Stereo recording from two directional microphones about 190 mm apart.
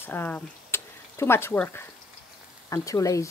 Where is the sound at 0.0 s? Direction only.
10° left (ahead or behind).